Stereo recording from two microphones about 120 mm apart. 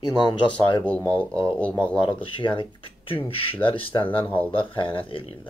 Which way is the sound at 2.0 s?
45° left (ahead or behind).